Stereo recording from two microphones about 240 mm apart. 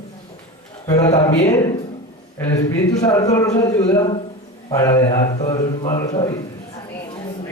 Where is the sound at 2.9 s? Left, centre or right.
Centre.